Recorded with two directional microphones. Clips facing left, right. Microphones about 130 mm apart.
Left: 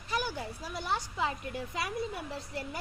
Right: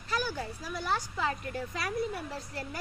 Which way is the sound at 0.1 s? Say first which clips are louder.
Right 1 dB; 20° left (ahead or behind).